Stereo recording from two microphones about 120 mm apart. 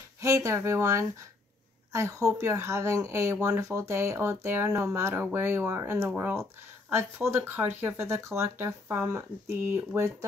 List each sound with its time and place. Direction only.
0.2 s speech: 25° right (ahead or behind)